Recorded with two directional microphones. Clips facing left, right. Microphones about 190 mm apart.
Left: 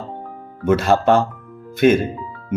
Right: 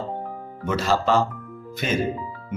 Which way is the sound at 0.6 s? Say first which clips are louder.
Left 7 dB; 55° left (ahead or behind).